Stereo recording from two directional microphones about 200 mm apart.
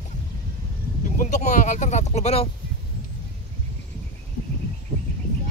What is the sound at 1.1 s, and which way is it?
Speech, 35° left (ahead or behind).